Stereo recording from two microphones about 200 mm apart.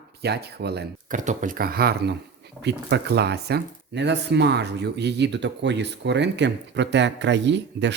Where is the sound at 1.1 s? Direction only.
40° right (ahead or behind).